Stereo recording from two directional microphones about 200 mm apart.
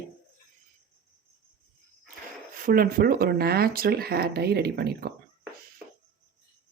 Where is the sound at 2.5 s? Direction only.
45° right (ahead or behind).